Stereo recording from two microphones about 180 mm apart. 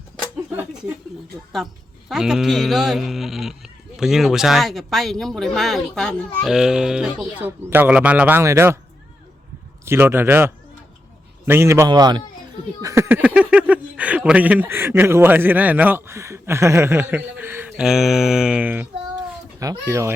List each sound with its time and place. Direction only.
0.5 s speech: 5° right (ahead or behind)
2.0 s speech: 5° right (ahead or behind)
9.8 s a man's voice: 15° right (ahead or behind)